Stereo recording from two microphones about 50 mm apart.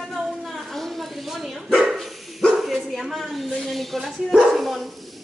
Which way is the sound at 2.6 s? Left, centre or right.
Centre.